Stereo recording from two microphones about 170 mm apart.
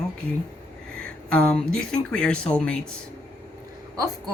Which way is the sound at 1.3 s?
5° left (ahead or behind).